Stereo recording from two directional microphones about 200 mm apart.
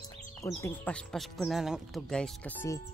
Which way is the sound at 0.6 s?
10° left (ahead or behind).